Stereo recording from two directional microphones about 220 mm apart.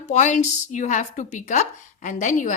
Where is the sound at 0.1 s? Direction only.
35° left (ahead or behind).